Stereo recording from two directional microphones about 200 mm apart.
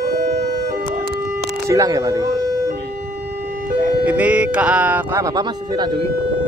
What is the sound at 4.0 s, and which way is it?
Speech, 5° right (ahead or behind).